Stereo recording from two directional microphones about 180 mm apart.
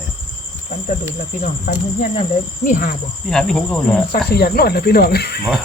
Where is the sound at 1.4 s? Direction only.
45° left (ahead or behind).